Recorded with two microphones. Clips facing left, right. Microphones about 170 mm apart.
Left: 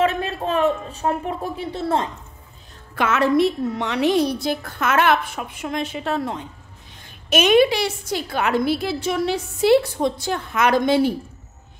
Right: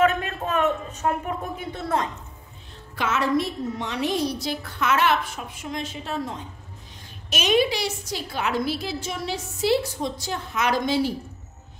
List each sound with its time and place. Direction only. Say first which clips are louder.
0.0 s speech: left 1 dB; 30° left (ahead or behind)
3.0 s a woman's voice: left 6 dB; 60° left (ahead or behind)